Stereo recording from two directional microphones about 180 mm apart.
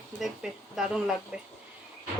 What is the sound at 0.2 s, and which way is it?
Speech, centre (ahead or behind).